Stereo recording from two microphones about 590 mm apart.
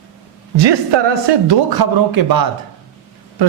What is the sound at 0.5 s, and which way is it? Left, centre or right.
A woman's voice, right.